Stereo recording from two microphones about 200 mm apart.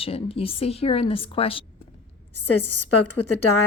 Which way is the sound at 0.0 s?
30° left (ahead or behind).